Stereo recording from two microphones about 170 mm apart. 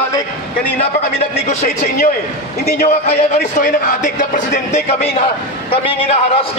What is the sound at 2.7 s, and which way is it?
Speech, 60° left (ahead or behind).